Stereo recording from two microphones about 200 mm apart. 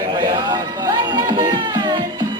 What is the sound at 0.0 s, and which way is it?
Music, 20° right (ahead or behind).